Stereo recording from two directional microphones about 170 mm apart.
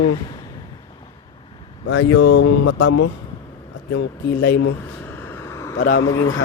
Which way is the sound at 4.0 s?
70° left (ahead or behind).